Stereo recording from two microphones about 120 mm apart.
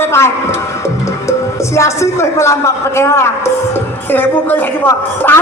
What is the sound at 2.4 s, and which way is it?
A man's voice, 25° left (ahead or behind).